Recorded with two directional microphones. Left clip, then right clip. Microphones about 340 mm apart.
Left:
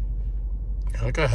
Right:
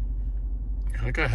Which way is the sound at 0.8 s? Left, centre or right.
Centre.